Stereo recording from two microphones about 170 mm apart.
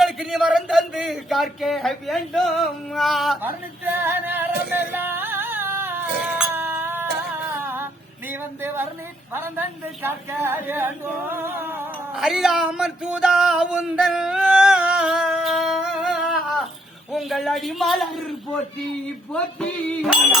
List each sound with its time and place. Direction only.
0.0 s a man's voice: centre (ahead or behind)
3.8 s singing: 10° right (ahead or behind)
7.5 s music: 15° right (ahead or behind)
8.3 s a sound: 10° right (ahead or behind)
12.1 s a sound: centre (ahead or behind)
17.1 s a man's voice: centre (ahead or behind)